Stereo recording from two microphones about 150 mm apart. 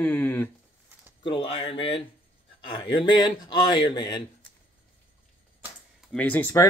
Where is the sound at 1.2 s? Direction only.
35° left (ahead or behind).